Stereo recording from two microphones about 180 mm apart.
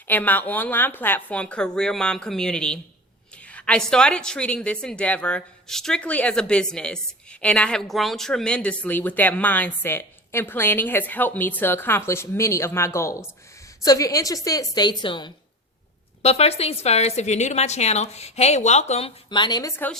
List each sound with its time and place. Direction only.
0.1 s a woman's voice: 10° left (ahead or behind); by 15.3 s 25° left (ahead or behind)
16.2 s a woman's voice: 35° left (ahead or behind)
19.7 s a woman's voice: 10° left (ahead or behind)